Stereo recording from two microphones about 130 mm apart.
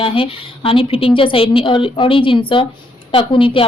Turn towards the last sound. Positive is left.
turn(degrees=40)  # may be behind; listen again after turning